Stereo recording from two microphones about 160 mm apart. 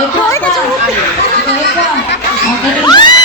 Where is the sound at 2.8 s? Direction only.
25° left (ahead or behind).